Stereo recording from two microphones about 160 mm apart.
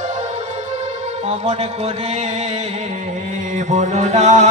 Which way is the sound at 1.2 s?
45° right (ahead or behind).